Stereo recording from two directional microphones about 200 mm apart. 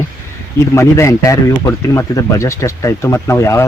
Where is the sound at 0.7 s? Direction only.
15° left (ahead or behind).